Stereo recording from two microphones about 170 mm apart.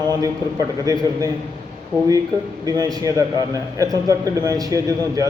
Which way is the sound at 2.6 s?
20° right (ahead or behind).